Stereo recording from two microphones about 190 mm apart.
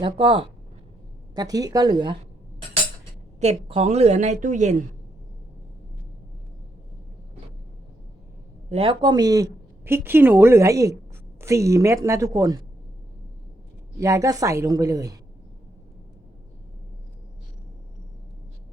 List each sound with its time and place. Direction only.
0.0 s speech: 30° right (ahead or behind)
3.4 s a woman's voice: 30° right (ahead or behind)
8.7 s speech: 30° right (ahead or behind)
14.0 s speech: 15° right (ahead or behind)